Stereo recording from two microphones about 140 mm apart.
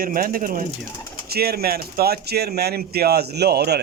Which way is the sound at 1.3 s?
90° right.